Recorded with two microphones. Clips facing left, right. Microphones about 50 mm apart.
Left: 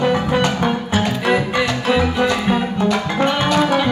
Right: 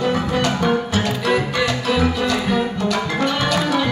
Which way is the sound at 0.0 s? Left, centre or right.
Left.